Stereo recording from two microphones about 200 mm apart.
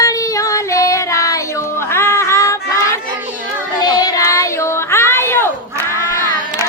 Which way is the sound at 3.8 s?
20° left (ahead or behind).